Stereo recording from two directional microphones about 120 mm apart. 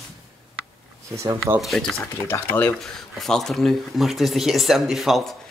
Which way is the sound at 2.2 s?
15° left (ahead or behind).